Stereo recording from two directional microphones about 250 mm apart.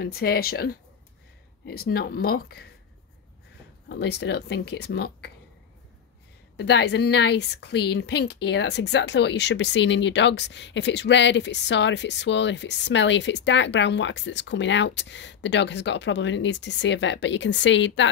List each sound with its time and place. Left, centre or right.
0.0 s speech: left
3.9 s speech: left
6.5 s a woman's voice: left